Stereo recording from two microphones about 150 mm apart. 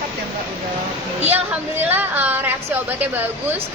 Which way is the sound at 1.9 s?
15° right (ahead or behind).